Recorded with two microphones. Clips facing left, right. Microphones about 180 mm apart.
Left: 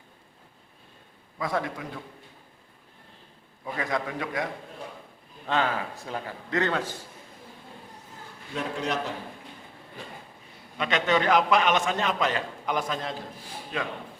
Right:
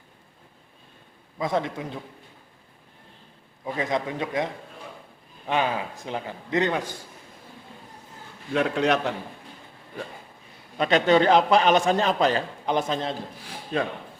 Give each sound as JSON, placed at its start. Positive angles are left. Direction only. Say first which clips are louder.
{"t": 1.4, "sound": "a man's voice", "louder": "right 3 dB", "side_deg": -20}
{"t": 3.6, "sound": "a man's voice", "louder": "right 3 dB", "side_deg": -20}
{"t": 5.5, "sound": "a man's voice", "louder": "right 2 dB", "side_deg": -15}
{"t": 8.5, "sound": "a man's voice", "louder": "right 7 dB", "side_deg": -70}
{"t": 10.8, "sound": "a man's voice", "louder": "right 6 dB", "side_deg": -35}